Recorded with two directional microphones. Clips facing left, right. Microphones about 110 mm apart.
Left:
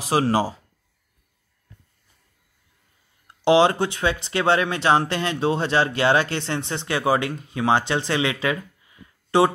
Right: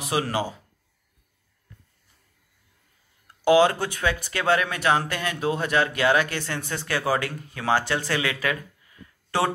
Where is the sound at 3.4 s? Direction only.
25° left (ahead or behind).